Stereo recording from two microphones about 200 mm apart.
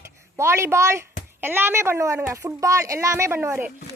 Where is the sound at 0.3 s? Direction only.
15° right (ahead or behind).